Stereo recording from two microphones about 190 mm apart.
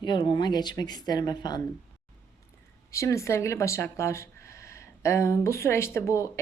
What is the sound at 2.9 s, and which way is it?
Speech, 15° left (ahead or behind).